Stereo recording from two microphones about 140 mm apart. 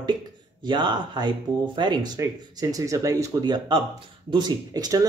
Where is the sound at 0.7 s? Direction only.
35° right (ahead or behind).